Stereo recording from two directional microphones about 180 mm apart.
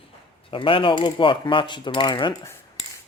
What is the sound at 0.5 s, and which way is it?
Speech, 30° left (ahead or behind).